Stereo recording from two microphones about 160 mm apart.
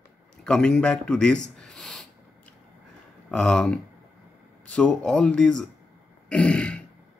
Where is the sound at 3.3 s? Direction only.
5° left (ahead or behind).